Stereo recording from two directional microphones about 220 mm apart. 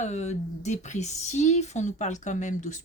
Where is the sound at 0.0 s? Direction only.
30° left (ahead or behind).